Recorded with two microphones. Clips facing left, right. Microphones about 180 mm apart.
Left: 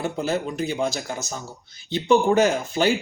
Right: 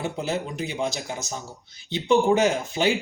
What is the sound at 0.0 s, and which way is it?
Speech, 20° right (ahead or behind).